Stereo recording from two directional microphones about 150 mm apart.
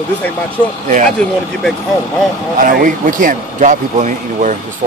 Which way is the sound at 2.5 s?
65° right (ahead or behind).